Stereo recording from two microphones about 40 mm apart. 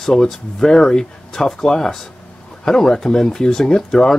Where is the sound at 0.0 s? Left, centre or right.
Centre.